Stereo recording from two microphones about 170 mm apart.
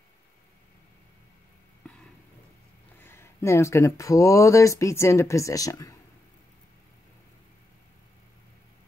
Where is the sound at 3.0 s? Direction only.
15° left (ahead or behind).